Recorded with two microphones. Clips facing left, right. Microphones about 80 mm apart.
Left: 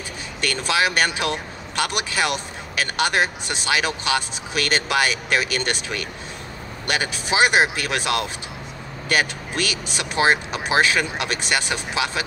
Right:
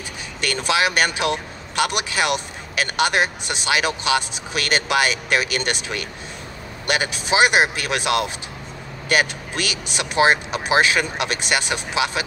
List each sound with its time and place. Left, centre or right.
0.4 s speech: right